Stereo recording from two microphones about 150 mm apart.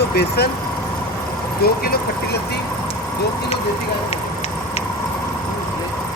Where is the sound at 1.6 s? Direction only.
90° left.